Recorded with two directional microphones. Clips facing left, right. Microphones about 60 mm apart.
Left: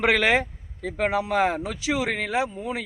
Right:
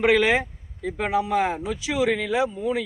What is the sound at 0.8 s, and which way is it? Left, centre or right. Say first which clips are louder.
A man's voice: even; left.